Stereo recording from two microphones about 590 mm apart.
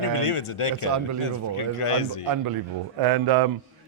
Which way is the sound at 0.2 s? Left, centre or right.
Left.